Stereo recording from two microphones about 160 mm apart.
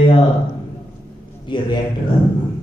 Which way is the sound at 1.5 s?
30° left (ahead or behind).